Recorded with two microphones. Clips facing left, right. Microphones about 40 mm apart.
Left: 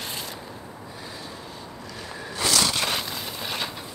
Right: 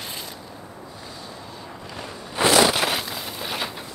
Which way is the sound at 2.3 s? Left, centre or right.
Right.